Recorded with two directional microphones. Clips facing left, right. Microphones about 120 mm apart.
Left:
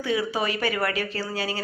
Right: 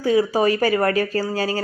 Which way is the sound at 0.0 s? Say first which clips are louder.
Right 8 dB; 40° right (ahead or behind).